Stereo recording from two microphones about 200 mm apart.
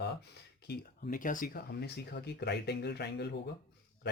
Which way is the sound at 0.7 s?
45° left (ahead or behind).